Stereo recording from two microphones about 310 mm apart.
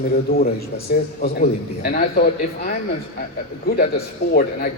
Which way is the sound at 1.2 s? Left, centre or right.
Left.